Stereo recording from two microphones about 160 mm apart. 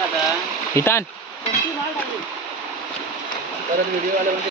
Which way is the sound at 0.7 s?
15° left (ahead or behind).